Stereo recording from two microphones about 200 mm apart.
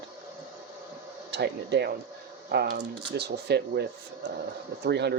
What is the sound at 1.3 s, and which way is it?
Speech, 60° right (ahead or behind).